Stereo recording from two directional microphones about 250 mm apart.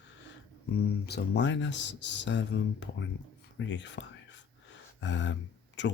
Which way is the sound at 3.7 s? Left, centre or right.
Left.